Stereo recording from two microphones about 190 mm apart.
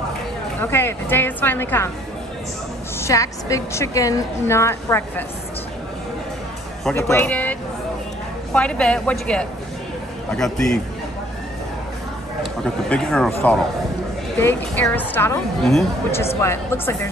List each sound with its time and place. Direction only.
0.6 s a woman's voice: 10° left (ahead or behind)
3.0 s a woman's voice: 15° left (ahead or behind)
6.8 s speech: 10° left (ahead or behind)
8.5 s a woman's voice: 5° left (ahead or behind)
12.9 s a woman's voice: 5° left (ahead or behind)
16.3 s a woman's voice: 10° left (ahead or behind)